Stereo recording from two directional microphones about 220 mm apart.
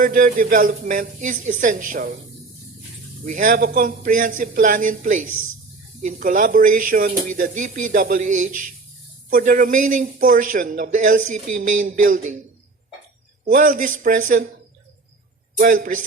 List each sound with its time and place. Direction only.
0.0 s speech: 40° right (ahead or behind)
3.2 s speech: 35° right (ahead or behind)
13.4 s speech: 40° right (ahead or behind)
15.5 s speech: 35° right (ahead or behind)